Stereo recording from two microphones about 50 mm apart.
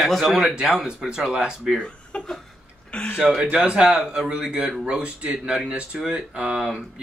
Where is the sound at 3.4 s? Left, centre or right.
Right.